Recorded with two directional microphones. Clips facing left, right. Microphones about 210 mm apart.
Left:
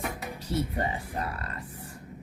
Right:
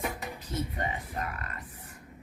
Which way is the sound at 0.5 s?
35° left (ahead or behind).